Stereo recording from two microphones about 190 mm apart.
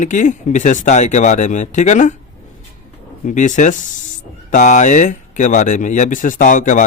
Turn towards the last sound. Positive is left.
turn(degrees=40)  # may be behind; listen again after turning